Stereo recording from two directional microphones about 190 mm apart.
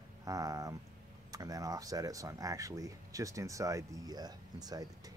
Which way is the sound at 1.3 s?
20° right (ahead or behind).